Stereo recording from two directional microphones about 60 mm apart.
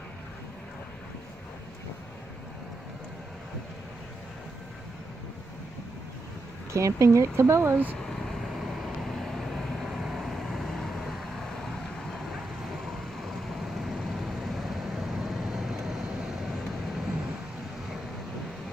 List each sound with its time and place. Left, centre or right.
6.7 s speech: right
8.0 s vehicle: centre
13.7 s vehicle: centre